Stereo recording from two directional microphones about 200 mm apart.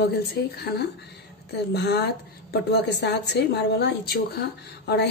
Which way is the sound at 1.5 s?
55° left (ahead or behind).